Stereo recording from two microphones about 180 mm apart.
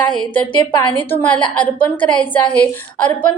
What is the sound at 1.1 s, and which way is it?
A woman's voice, 10° left (ahead or behind).